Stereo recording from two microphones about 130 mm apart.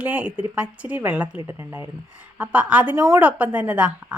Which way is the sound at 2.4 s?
10° right (ahead or behind).